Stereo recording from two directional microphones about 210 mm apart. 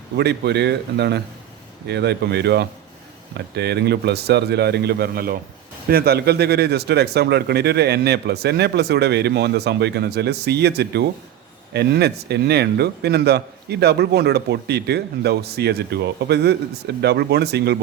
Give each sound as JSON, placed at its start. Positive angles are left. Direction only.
{"t": 0.2, "sound": "a man's voice", "side_deg": -55}